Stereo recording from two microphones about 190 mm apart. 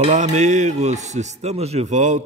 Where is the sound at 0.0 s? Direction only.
35° right (ahead or behind).